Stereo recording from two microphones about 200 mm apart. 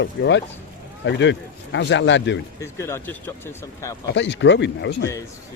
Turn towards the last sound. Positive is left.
turn(degrees=60)  # may be behind; listen again after turning